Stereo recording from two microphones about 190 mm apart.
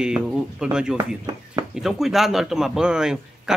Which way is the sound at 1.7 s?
Centre (ahead or behind).